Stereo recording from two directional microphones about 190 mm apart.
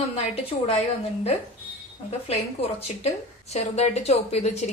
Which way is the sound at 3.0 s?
35° left (ahead or behind).